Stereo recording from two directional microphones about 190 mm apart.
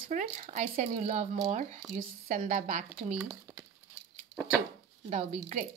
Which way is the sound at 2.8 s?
10° right (ahead or behind).